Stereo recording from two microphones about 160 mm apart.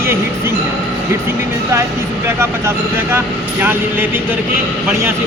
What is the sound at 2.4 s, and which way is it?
Speech, 15° right (ahead or behind).